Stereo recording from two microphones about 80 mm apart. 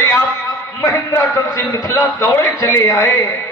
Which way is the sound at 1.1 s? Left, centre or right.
Left.